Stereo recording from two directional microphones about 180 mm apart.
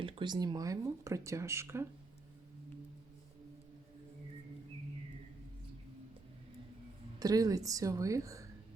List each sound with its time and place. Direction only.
0.0 s speech: 25° right (ahead or behind)
7.2 s speech: 20° right (ahead or behind)